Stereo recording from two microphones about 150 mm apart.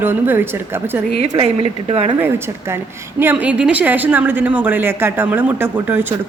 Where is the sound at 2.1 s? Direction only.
15° right (ahead or behind).